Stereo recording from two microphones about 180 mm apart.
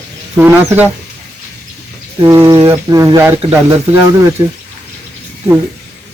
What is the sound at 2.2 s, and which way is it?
Speech, 15° right (ahead or behind).